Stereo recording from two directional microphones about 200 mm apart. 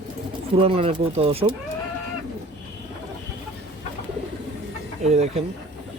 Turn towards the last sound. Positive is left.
turn(degrees=-35)  # may be behind; listen again after turning